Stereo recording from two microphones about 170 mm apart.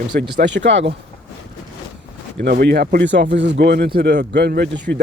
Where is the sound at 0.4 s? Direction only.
90° right.